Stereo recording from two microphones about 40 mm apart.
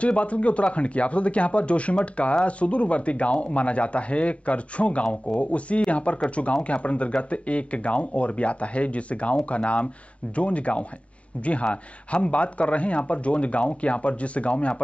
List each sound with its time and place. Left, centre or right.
0.0 s speech: left